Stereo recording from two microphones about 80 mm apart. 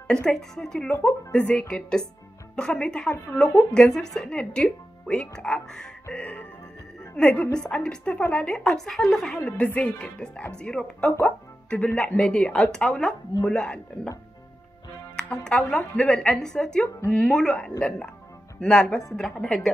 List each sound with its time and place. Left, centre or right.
0.1 s a woman's voice: centre
15.1 s a woman's voice: centre